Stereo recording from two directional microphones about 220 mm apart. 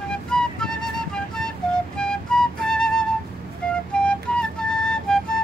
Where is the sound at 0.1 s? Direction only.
5° left (ahead or behind).